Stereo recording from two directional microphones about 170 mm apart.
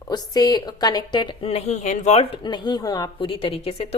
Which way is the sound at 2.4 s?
25° left (ahead or behind).